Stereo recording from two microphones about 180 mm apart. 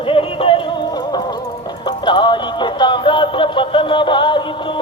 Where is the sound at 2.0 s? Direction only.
25° left (ahead or behind).